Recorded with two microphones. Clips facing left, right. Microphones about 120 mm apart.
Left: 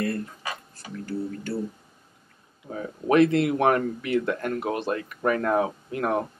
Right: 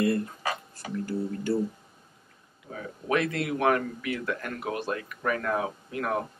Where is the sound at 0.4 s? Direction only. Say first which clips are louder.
Right 3 dB; 40° right (ahead or behind).